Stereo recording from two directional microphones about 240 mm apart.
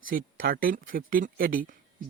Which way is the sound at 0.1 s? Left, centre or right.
Right.